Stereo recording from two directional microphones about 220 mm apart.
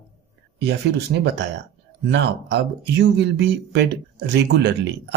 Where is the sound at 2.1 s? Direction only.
50° right (ahead or behind).